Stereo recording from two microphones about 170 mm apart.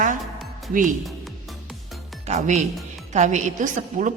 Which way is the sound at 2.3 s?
45° right (ahead or behind).